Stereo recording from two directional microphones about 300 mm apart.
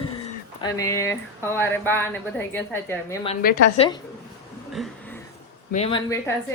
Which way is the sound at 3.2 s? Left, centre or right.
Left.